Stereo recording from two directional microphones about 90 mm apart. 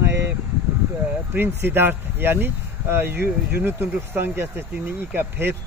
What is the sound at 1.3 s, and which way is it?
Speech, 25° right (ahead or behind).